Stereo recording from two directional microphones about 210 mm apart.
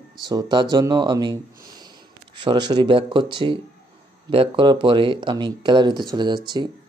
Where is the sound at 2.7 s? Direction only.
25° right (ahead or behind).